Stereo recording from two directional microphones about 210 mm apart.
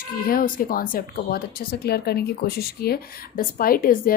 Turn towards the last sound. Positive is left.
turn(degrees=45)  # may be behind; listen again after turning